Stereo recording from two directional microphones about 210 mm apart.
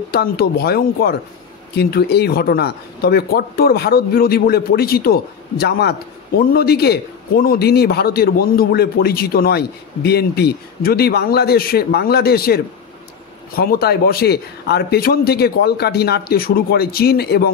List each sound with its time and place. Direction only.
0.1 s speech: 45° left (ahead or behind)